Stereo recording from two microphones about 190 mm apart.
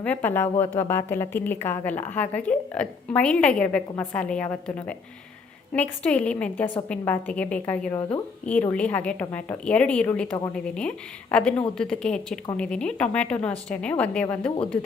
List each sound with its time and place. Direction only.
0.0 s a woman's voice: 10° left (ahead or behind)